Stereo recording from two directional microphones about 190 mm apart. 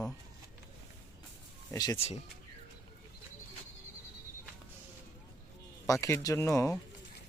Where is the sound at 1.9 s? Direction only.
30° left (ahead or behind).